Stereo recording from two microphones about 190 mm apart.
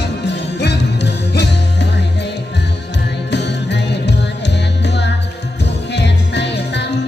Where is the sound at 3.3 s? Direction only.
65° left (ahead or behind).